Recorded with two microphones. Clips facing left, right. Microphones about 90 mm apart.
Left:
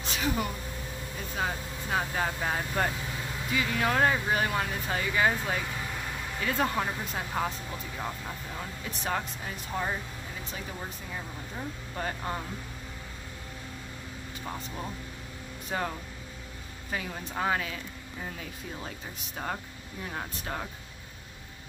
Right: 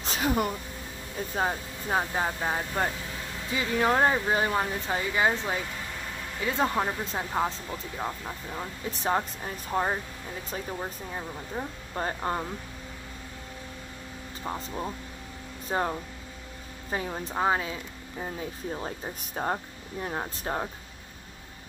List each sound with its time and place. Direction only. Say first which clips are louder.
0.0 s a sound: right 4 dB; 40° right (ahead or behind)
1.3 s speech: right 3 dB; 30° right (ahead or behind); by 2.9 s 15° right (ahead or behind)
3.5 s speech: right 3 dB; 25° right (ahead or behind)
8.9 s speech: right 5 dB; 30° right (ahead or behind)
14.4 s speech: right 5 dB; 25° right (ahead or behind)